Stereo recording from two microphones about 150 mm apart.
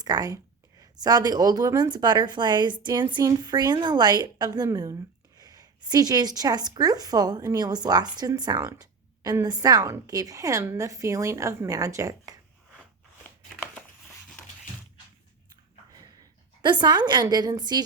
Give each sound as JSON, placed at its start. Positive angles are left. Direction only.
{"t": 0.0, "sound": "a woman's voice", "side_deg": -25}
{"t": 16.6, "sound": "a woman's voice", "side_deg": -30}